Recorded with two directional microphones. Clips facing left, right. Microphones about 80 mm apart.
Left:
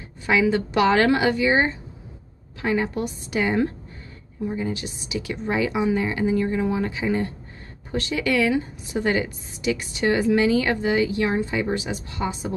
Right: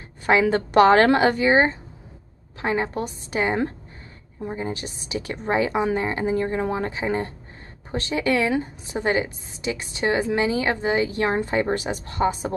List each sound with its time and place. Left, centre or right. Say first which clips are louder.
0.3 s a woman's voice: right 2 dB; right